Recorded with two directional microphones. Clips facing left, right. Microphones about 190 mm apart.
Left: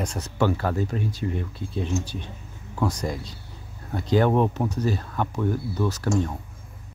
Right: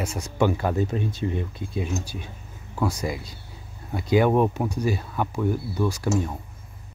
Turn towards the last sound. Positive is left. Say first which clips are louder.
# even
turn(degrees=-10)  # may be behind; listen again after turning